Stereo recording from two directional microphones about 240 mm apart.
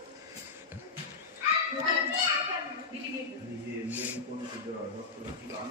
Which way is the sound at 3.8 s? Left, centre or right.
Centre.